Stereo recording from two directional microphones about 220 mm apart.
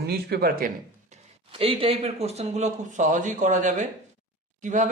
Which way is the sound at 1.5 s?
25° right (ahead or behind).